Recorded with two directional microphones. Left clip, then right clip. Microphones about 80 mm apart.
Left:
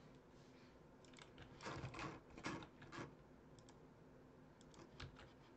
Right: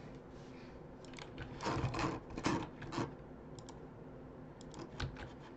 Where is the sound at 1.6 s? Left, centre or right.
Right.